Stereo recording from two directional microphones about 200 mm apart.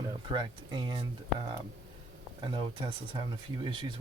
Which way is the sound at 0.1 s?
25° right (ahead or behind).